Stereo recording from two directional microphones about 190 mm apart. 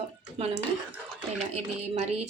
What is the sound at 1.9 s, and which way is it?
Speech, 35° right (ahead or behind).